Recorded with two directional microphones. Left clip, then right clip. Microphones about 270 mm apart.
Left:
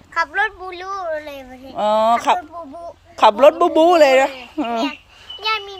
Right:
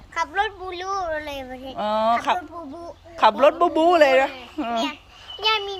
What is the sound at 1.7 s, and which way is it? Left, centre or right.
Speech, left.